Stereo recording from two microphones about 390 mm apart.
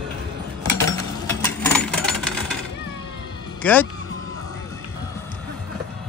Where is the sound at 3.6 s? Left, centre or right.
Centre.